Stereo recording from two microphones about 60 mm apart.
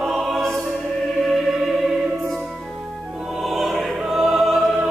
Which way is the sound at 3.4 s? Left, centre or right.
Centre.